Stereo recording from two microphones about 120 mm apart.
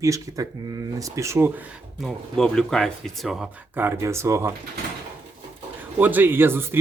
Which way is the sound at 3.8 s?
20° right (ahead or behind).